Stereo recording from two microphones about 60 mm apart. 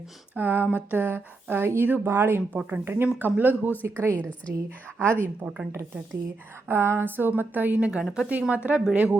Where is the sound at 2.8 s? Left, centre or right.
Right.